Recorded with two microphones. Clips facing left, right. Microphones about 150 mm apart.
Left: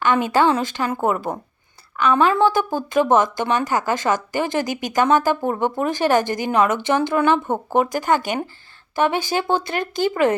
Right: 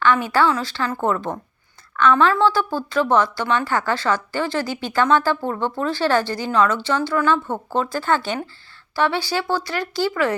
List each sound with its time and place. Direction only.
0.0 s a woman's voice: 20° left (ahead or behind)